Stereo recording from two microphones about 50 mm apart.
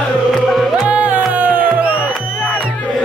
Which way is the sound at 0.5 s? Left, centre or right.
Centre.